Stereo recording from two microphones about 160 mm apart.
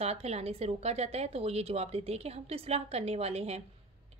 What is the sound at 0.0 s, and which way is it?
A woman's voice, 40° right (ahead or behind).